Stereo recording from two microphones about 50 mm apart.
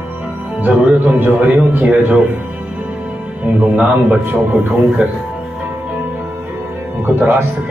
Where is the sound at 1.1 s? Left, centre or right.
Right.